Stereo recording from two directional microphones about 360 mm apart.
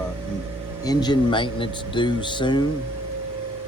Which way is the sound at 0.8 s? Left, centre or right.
Centre.